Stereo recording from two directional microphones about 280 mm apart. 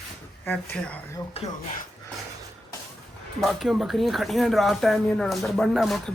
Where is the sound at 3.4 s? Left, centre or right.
Centre.